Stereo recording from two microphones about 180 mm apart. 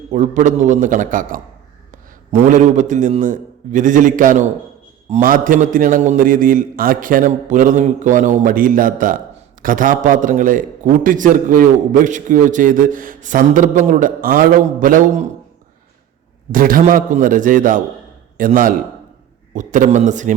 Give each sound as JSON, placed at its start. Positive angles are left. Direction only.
{"t": 0.1, "sound": "a man's voice", "side_deg": -45}
{"t": 16.5, "sound": "a man's voice", "side_deg": -50}